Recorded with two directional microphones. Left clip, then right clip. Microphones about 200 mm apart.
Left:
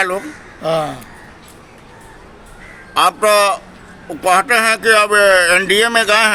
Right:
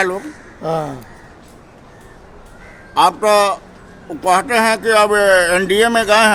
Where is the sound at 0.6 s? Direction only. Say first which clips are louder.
Left 3 dB; 55° right (ahead or behind).